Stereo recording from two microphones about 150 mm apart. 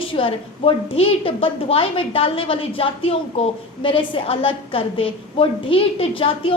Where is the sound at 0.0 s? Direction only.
35° left (ahead or behind).